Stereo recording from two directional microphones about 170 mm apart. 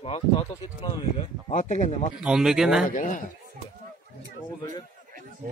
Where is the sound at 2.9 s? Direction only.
50° left (ahead or behind).